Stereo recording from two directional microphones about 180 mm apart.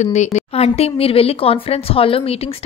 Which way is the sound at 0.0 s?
40° left (ahead or behind).